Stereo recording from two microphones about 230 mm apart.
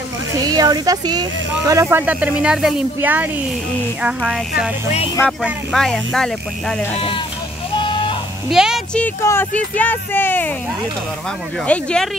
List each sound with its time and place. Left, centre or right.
0.4 s speech: centre
4.0 s music: centre
7.7 s a sound: left
8.5 s music: centre
9.6 s speech: centre
11.6 s music: centre